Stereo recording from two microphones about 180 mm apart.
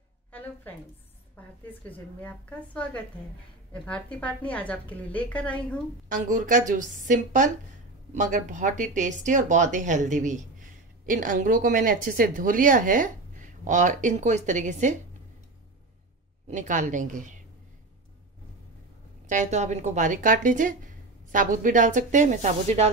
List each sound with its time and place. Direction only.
0.3 s a woman's voice: 10° left (ahead or behind)
1.9 s a woman's voice: 10° left (ahead or behind)
6.0 s speech: 45° right (ahead or behind)
16.4 s speech: 45° right (ahead or behind)
19.2 s speech: 45° right (ahead or behind)